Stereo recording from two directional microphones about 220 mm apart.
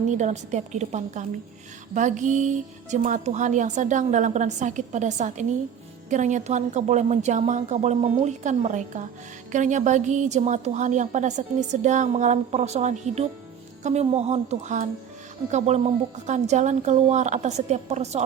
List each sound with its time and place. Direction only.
0.1 s a woman's voice: 35° right (ahead or behind)